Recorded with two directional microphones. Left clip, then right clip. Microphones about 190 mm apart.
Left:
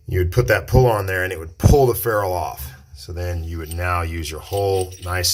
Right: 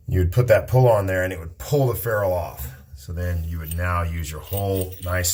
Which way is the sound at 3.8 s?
50° left (ahead or behind).